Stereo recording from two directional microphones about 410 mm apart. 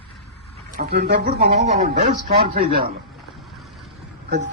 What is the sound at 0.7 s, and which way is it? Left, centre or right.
Speech, right.